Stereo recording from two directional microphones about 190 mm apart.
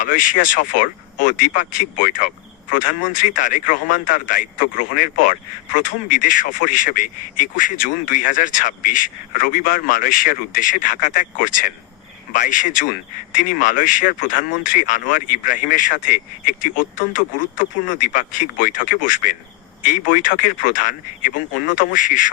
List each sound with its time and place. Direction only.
0.0 s speech: 45° left (ahead or behind)